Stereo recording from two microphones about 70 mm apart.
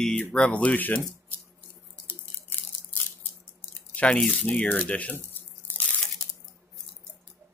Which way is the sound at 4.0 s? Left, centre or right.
Centre.